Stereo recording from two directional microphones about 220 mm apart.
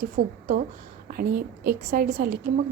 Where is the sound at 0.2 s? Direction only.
40° right (ahead or behind).